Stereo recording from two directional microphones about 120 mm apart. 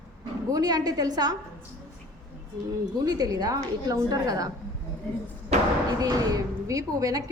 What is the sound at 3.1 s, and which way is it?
A woman's voice, 35° right (ahead or behind).